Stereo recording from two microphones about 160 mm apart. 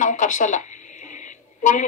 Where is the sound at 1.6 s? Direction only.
55° left (ahead or behind).